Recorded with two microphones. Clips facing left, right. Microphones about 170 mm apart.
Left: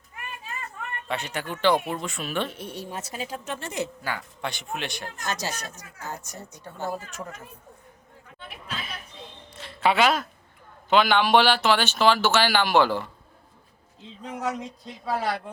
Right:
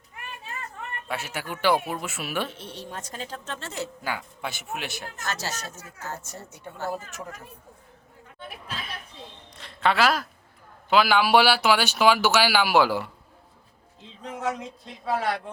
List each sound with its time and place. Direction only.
1.0 s speech: 5° right (ahead or behind)
2.5 s a woman's voice: 10° left (ahead or behind)
4.0 s speech: 10° right (ahead or behind)
5.2 s a woman's voice: 15° left (ahead or behind)
6.9 s speech: 5° right (ahead or behind)
9.5 s speech: 5° left (ahead or behind)
14.2 s speech: centre (ahead or behind)